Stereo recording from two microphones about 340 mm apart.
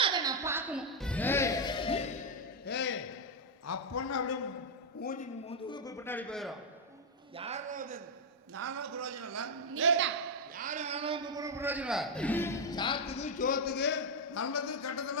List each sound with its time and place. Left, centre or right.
0.0 s music: centre
2.6 s music: left
3.7 s a sound: left
5.0 s a man's voice: left; by 6.5 s centre
7.3 s a man's voice: centre
8.5 s a man's voice: right
10.5 s a man's voice: right; by 15.2 s left